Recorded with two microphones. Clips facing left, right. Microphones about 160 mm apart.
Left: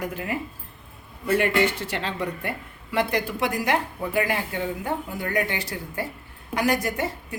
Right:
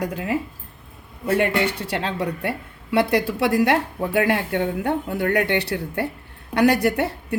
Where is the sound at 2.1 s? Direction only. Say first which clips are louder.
Right 4 dB; 70° right (ahead or behind).